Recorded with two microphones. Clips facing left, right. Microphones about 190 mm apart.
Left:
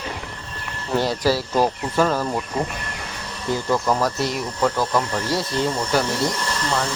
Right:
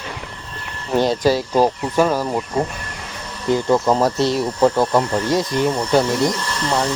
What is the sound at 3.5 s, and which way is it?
Speech, 25° right (ahead or behind).